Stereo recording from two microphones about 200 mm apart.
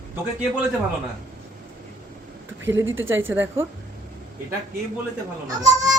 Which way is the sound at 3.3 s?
10° right (ahead or behind).